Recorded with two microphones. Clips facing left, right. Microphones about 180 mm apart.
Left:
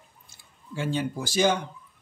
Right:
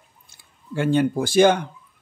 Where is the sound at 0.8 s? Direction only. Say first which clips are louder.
Right 9 dB; 60° right (ahead or behind).